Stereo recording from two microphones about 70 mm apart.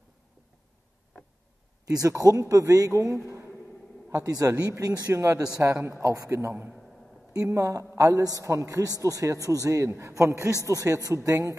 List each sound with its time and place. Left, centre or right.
1.9 s a man's voice: right
3.3 s a sound: right
4.1 s a man's voice: right
6.0 s speech: right
7.4 s a man's voice: right